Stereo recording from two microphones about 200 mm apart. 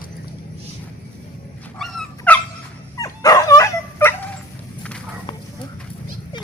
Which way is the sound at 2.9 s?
15° left (ahead or behind).